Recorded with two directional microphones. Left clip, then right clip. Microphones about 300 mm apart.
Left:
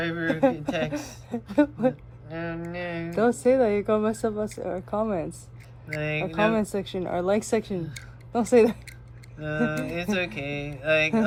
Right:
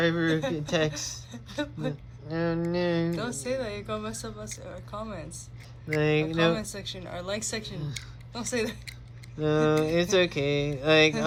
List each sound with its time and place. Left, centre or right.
0.0 s mantra: centre
1.3 s speech: left
2.2 s speech: centre
2.7 s mantra: centre
3.2 s speech: centre
6.0 s mantra: centre
6.6 s speech: centre
9.4 s mantra: centre